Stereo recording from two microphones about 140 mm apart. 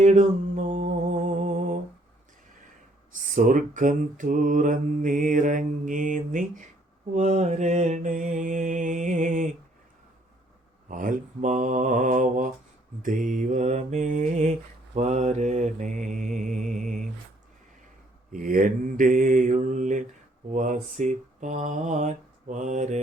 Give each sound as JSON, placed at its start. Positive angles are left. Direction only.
{"t": 0.0, "sound": "mantra", "side_deg": -60}
{"t": 3.2, "sound": "mantra", "side_deg": -70}
{"t": 10.8, "sound": "mantra", "side_deg": -70}
{"t": 18.3, "sound": "mantra", "side_deg": -80}